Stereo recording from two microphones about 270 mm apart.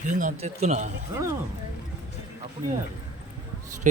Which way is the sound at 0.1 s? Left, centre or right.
Right.